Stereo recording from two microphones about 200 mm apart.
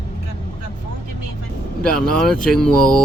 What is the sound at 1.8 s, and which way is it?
Speech, 5° left (ahead or behind).